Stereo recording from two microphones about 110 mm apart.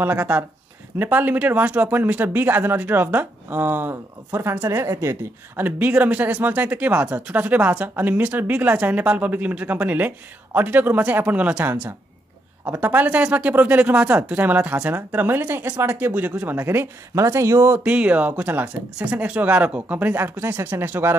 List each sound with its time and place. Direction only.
0.0 s speech: 20° right (ahead or behind)
5.6 s speech: 15° right (ahead or behind)
12.8 s speech: 15° right (ahead or behind)